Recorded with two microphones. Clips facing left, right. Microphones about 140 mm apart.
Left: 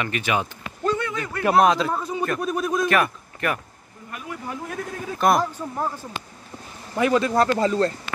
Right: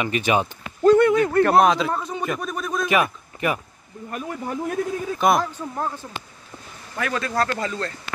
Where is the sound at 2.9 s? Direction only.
15° right (ahead or behind).